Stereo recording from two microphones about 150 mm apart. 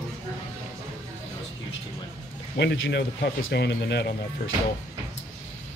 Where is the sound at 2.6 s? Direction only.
90° left.